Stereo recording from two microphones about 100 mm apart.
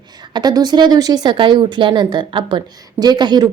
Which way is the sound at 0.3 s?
40° right (ahead or behind).